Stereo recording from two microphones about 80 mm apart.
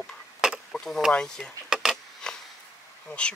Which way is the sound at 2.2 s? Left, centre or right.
Centre.